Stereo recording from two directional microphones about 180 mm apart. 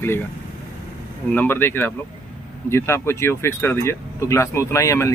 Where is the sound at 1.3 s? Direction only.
10° left (ahead or behind).